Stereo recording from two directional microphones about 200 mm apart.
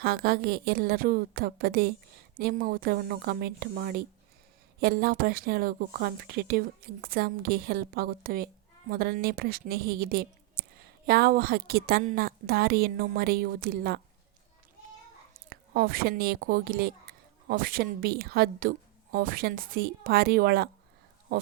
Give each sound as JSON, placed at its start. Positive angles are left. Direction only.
{"t": 0.0, "sound": "a woman's voice", "side_deg": -50}
{"t": 15.3, "sound": "a woman's voice", "side_deg": -45}